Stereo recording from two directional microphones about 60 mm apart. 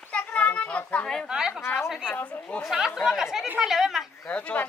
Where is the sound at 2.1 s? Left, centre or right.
Left.